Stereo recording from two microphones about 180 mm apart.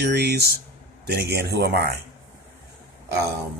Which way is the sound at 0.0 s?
65° right (ahead or behind).